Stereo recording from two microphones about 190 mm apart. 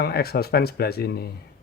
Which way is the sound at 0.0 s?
55° left (ahead or behind).